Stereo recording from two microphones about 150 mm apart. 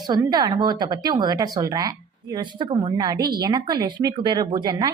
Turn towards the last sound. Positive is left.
turn(degrees=-25)  # may be behind; listen again after turning